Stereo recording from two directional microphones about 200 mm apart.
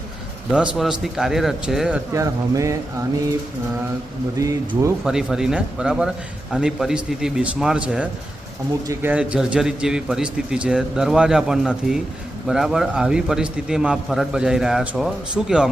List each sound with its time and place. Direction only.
0.5 s a man's voice: 5° right (ahead or behind)
2.1 s speech: 15° right (ahead or behind)
4.4 s speech: 15° right (ahead or behind)
5.0 s a man's voice: 5° right (ahead or behind)